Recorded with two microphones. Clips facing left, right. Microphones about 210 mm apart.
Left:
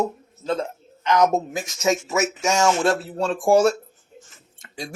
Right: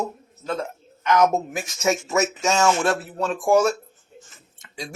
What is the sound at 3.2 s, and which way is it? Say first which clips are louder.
Speech: left 2 dB; 30° left (ahead or behind).